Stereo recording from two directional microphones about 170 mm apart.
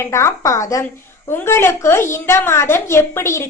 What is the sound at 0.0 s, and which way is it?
A woman's voice, 15° left (ahead or behind).